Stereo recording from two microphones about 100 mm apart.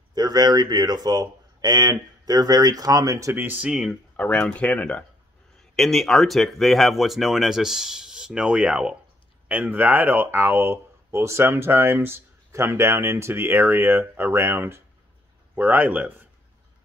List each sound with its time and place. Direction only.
0.1 s speech: 40° right (ahead or behind)
3.3 s speech: 15° right (ahead or behind)
4.2 s speech: 10° left (ahead or behind)
5.6 s speech: centre (ahead or behind); by 16.3 s 15° right (ahead or behind)